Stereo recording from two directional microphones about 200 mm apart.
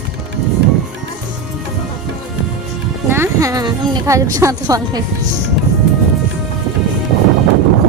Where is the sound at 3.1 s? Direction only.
15° right (ahead or behind).